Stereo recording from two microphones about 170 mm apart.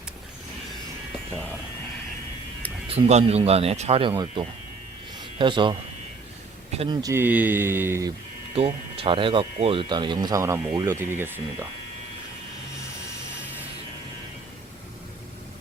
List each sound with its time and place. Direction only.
2.8 s speech: 35° right (ahead or behind)
4.1 s speech: 25° right (ahead or behind)
6.7 s speech: 25° right (ahead or behind)
8.5 s speech: 30° right (ahead or behind); by 11.7 s 15° right (ahead or behind)